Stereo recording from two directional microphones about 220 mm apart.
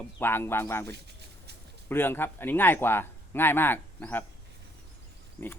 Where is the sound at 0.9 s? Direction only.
50° right (ahead or behind).